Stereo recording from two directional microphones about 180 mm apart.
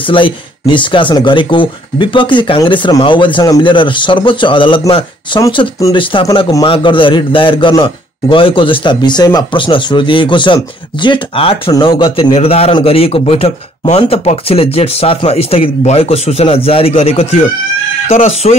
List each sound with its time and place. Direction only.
0.0 s a man's voice: 30° left (ahead or behind)